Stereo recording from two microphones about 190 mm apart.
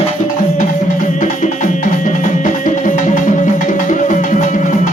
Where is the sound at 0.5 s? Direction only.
40° left (ahead or behind).